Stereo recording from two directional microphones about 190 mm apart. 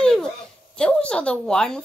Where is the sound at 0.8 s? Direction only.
5° left (ahead or behind).